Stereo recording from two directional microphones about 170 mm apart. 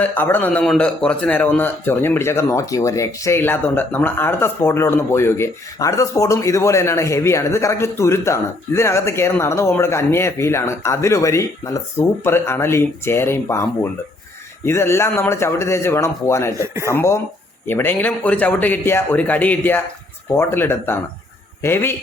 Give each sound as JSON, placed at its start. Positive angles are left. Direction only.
{"t": 0.0, "sound": "a man's voice", "side_deg": 10}
{"t": 16.6, "sound": "speech", "side_deg": -15}
{"t": 17.7, "sound": "a man's voice", "side_deg": 10}